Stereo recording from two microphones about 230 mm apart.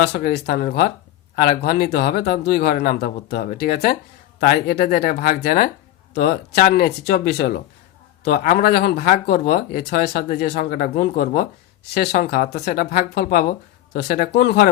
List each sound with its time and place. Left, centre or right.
0.0 s speech: left